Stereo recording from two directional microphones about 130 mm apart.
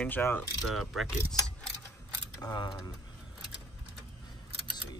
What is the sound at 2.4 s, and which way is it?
Speech, 30° left (ahead or behind).